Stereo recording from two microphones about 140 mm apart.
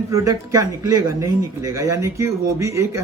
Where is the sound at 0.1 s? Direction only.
25° right (ahead or behind).